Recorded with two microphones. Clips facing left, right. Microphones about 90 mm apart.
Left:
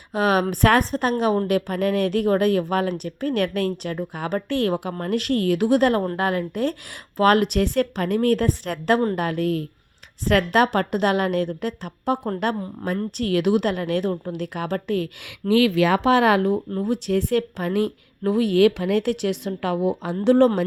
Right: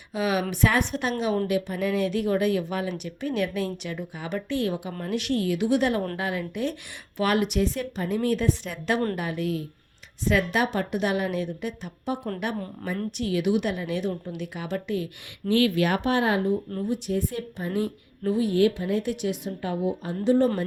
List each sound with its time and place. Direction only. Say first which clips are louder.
0.1 s a woman's voice: left 6 dB; 55° left (ahead or behind)
16.0 s speech: left 6 dB; 90° left
16.8 s a woman's voice: left 4 dB; 65° left (ahead or behind); by 20.1 s 85° left
20.2 s a woman's voice: left 5 dB; 70° left (ahead or behind)